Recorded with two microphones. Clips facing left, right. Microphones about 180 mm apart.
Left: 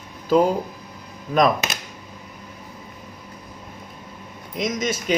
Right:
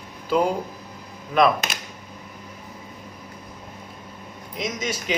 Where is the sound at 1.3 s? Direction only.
40° left (ahead or behind).